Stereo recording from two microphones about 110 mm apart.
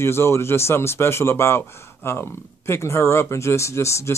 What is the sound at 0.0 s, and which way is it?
Speech, 25° left (ahead or behind).